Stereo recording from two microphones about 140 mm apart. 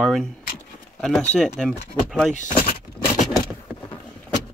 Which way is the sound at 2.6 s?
50° left (ahead or behind).